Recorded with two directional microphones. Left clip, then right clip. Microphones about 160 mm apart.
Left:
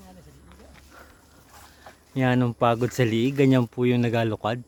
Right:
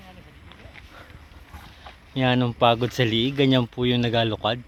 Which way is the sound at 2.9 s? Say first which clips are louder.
Right 1 dB; 15° left (ahead or behind).